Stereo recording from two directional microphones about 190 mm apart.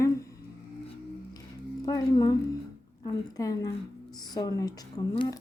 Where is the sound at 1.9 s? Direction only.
20° left (ahead or behind).